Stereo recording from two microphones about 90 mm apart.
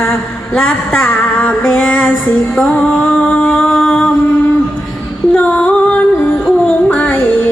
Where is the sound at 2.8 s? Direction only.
15° left (ahead or behind).